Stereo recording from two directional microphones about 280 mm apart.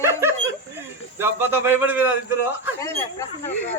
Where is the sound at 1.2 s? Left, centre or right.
Centre.